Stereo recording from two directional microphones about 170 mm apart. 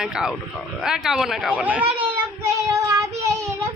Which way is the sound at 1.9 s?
15° right (ahead or behind).